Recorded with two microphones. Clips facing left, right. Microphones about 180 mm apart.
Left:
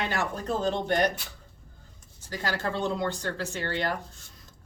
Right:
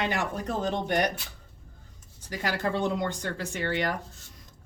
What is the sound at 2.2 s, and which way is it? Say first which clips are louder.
Speech: right 1 dB; 15° right (ahead or behind).